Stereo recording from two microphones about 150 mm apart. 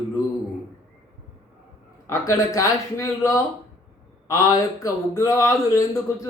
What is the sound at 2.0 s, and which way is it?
Speech, 20° left (ahead or behind).